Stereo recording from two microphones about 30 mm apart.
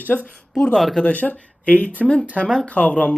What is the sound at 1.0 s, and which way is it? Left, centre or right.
Speech, left.